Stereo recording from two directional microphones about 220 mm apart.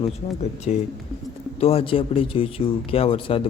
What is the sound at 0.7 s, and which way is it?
Speech, 30° left (ahead or behind).